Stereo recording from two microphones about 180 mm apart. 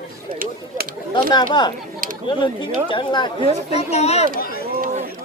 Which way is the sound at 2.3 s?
25° left (ahead or behind).